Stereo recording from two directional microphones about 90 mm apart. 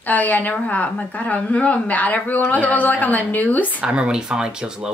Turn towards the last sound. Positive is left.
turn(degrees=-10)  # may be behind; listen again after turning